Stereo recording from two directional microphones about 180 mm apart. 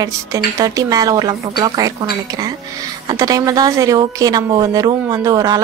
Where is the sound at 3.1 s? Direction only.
20° right (ahead or behind).